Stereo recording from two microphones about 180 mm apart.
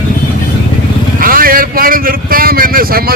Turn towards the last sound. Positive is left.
turn(degrees=-55)  # may be behind; listen again after turning